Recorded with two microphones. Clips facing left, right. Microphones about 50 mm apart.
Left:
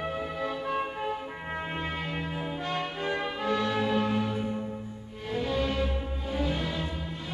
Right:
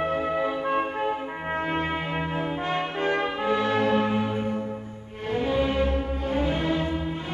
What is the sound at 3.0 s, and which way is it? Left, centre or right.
Brass instrument, right.